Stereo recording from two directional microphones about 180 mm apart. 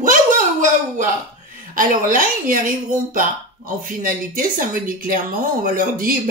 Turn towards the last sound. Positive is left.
turn(degrees=-50)  # may be behind; listen again after turning